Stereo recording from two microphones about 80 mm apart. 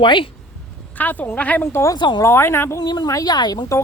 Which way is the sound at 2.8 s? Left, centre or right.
Left.